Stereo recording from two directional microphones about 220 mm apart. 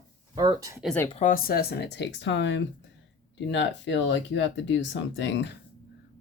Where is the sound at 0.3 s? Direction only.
15° right (ahead or behind).